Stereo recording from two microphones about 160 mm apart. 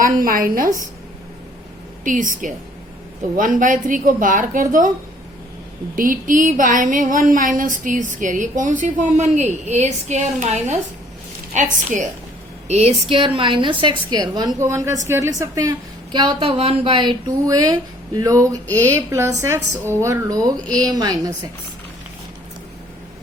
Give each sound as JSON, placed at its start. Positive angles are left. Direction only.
{"t": 0.0, "sound": "a woman's voice", "side_deg": -60}
{"t": 2.0, "sound": "a woman's voice", "side_deg": -55}
{"t": 6.0, "sound": "a sound", "side_deg": -55}
{"t": 12.6, "sound": "a woman's voice", "side_deg": -40}
{"t": 16.1, "sound": "a woman's voice", "side_deg": -30}